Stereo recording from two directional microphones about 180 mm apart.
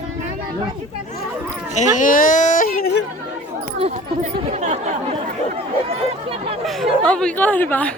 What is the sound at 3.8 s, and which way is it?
Speech, 40° right (ahead or behind).